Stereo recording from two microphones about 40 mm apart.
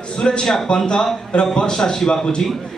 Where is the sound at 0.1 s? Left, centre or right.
Left.